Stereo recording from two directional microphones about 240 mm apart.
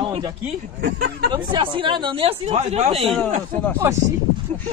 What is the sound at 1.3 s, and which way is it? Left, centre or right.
Speech, centre.